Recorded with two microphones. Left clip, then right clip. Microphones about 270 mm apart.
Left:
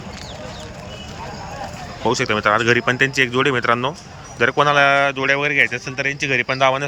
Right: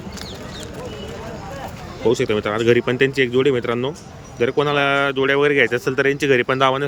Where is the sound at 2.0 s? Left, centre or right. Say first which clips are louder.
Left 2 dB; centre.